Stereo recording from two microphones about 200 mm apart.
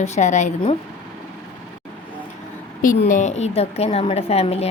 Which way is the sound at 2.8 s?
40° left (ahead or behind).